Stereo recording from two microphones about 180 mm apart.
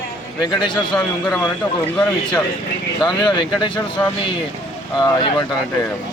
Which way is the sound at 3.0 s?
25° left (ahead or behind).